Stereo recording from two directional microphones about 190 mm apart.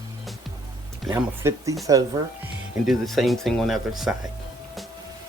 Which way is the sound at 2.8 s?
Centre (ahead or behind).